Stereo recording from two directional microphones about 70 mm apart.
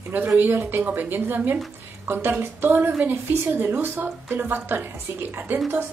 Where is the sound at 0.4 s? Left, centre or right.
Right.